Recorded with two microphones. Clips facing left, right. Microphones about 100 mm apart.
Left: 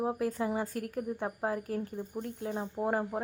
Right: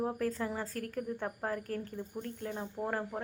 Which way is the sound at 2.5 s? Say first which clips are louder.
Left 5 dB; 20° left (ahead or behind).